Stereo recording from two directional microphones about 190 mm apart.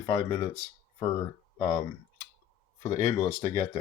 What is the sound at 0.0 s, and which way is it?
Speech, 20° left (ahead or behind).